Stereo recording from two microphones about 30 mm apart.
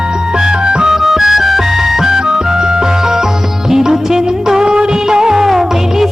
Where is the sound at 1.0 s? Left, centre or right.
Centre.